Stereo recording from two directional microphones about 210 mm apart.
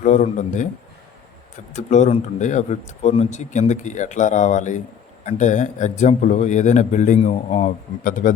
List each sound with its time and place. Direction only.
0.0 s a man's voice: 35° left (ahead or behind)
1.7 s a man's voice: 35° left (ahead or behind)